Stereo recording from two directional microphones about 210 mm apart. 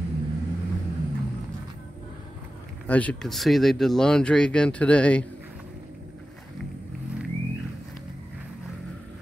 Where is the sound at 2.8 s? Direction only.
5° left (ahead or behind).